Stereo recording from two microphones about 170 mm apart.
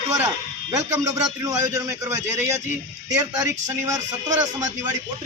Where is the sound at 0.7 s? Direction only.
20° right (ahead or behind).